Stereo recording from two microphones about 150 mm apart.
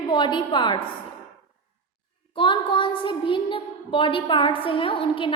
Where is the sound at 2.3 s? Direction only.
35° left (ahead or behind).